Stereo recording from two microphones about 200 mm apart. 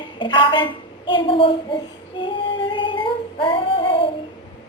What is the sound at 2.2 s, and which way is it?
Female singing, 25° left (ahead or behind).